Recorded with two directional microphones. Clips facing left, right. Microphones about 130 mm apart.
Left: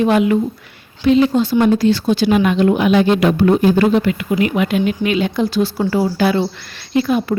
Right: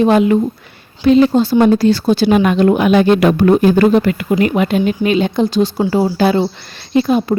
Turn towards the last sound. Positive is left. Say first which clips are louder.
# right 3 dB
turn(degrees=-25)  # may be behind; listen again after turning